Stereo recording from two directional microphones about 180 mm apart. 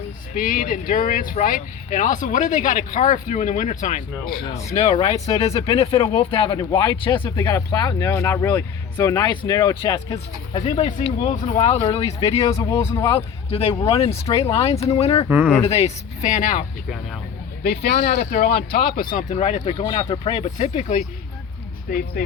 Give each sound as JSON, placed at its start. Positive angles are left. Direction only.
{"t": 0.3, "sound": "speech", "side_deg": 50}
{"t": 10.5, "sound": "speech", "side_deg": 35}
{"t": 12.9, "sound": "speech", "side_deg": 15}
{"t": 13.5, "sound": "speech", "side_deg": 35}
{"t": 14.1, "sound": "speech", "side_deg": 15}
{"t": 14.3, "sound": "speech", "side_deg": 35}
{"t": 15.3, "sound": "speech", "side_deg": -10}
{"t": 15.6, "sound": "speech", "side_deg": 35}
{"t": 17.6, "sound": "speech", "side_deg": 60}
{"t": 21.8, "sound": "speech", "side_deg": 55}